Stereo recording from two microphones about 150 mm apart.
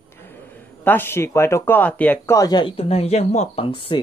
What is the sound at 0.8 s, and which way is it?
Speech, 15° left (ahead or behind).